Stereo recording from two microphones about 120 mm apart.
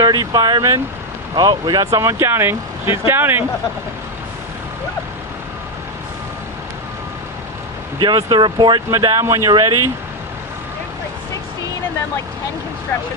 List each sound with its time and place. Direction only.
0.0 s speech: 35° right (ahead or behind); by 3.4 s 20° right (ahead or behind)
7.9 s speech: 35° right (ahead or behind)
9.5 s speech: 35° right (ahead or behind)